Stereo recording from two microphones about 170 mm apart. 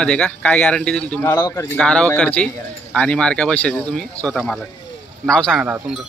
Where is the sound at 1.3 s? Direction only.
20° left (ahead or behind).